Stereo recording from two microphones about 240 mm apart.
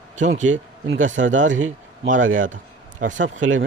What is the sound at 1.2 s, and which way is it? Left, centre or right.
Speech, right.